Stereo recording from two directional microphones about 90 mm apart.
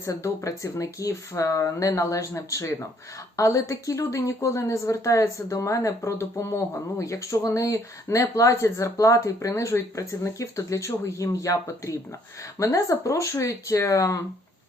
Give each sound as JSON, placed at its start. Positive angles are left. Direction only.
{"t": 0.0, "sound": "speech", "side_deg": 35}